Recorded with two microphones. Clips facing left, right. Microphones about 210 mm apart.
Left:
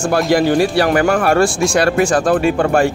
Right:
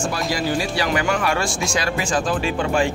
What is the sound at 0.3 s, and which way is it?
Speech, 60° left (ahead or behind).